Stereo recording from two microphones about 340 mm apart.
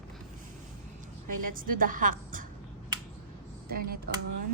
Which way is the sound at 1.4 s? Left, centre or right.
Right.